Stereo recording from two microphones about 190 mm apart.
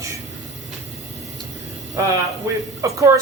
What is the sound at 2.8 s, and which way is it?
Speech, 15° right (ahead or behind).